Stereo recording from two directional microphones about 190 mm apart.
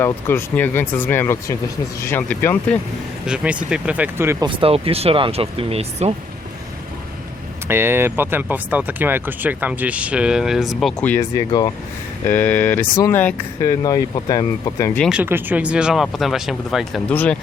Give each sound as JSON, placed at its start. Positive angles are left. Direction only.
{"t": 0.0, "sound": "speech", "side_deg": 10}
{"t": 3.2, "sound": "speech", "side_deg": -5}
{"t": 4.4, "sound": "speech", "side_deg": -30}
{"t": 7.7, "sound": "speech", "side_deg": -10}
{"t": 11.3, "sound": "speech", "side_deg": 20}
{"t": 12.3, "sound": "speech", "side_deg": 10}
{"t": 15.0, "sound": "speech", "side_deg": -5}